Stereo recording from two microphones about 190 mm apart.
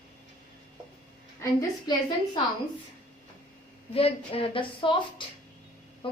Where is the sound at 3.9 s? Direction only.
30° left (ahead or behind).